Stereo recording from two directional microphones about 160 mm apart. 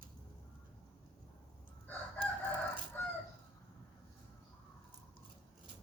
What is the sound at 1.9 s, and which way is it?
Crowing, 10° left (ahead or behind).